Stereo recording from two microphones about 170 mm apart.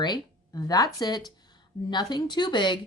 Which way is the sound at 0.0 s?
25° left (ahead or behind).